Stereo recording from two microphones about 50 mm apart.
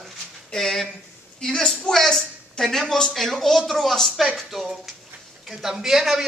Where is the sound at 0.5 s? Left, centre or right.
Centre.